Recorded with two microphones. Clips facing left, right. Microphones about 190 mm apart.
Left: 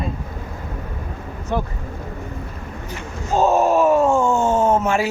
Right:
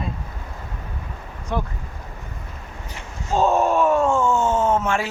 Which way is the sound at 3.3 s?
5° left (ahead or behind).